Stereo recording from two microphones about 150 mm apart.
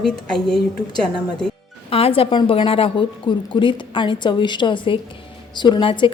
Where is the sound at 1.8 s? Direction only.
40° left (ahead or behind).